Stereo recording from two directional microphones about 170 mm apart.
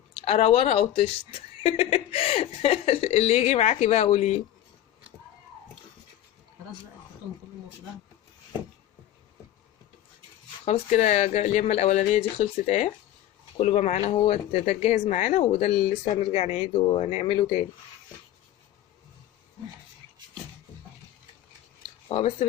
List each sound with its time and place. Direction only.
0.2 s speech: 35° left (ahead or behind)
10.7 s speech: 45° left (ahead or behind)
22.1 s speech: 35° left (ahead or behind)